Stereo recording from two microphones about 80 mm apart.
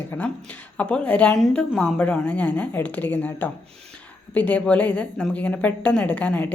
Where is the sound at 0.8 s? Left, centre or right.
Centre.